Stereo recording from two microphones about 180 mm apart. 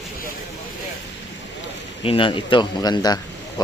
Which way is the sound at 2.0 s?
30° left (ahead or behind).